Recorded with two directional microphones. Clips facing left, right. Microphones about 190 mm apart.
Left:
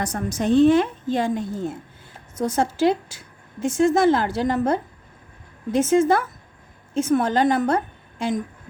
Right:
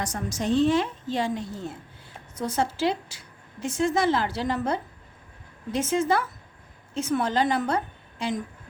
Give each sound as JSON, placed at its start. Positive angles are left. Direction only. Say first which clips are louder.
{"t": 0.0, "sound": "a woman's voice", "louder": "left 5 dB", "side_deg": 55}